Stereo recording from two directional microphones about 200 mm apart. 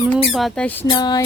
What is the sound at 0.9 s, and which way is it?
Speech, 20° left (ahead or behind).